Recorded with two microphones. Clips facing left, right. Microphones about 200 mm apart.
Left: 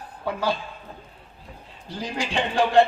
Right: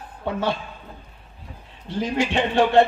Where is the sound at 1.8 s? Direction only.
25° right (ahead or behind).